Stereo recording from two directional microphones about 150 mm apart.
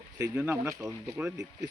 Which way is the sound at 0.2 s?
15° right (ahead or behind).